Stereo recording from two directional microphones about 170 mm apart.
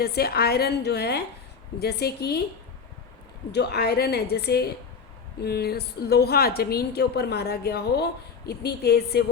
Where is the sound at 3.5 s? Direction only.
70° left (ahead or behind).